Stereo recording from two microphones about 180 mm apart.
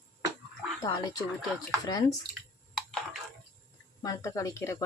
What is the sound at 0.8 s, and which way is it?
Speech, 20° left (ahead or behind).